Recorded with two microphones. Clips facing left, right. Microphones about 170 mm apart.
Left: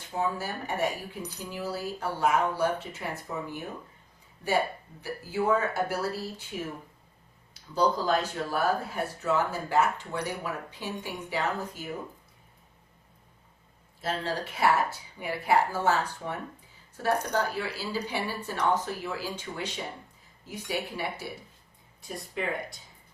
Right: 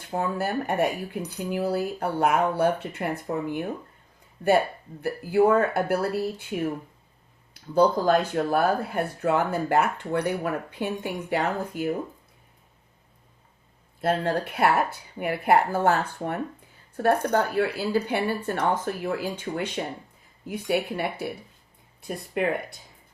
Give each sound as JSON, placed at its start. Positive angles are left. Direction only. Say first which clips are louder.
{"t": 0.1, "sound": "speech", "louder": "right 4 dB", "side_deg": -60}
{"t": 14.0, "sound": "speech", "louder": "right 7 dB", "side_deg": -55}